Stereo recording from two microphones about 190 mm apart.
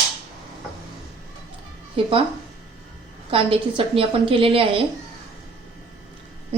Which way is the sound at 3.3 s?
30° right (ahead or behind).